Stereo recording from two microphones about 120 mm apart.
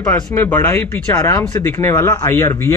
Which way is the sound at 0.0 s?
15° left (ahead or behind).